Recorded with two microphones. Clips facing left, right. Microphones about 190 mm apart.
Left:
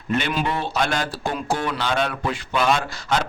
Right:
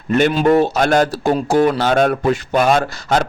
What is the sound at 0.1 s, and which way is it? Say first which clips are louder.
A man's voice: right 10 dB; 45° right (ahead or behind).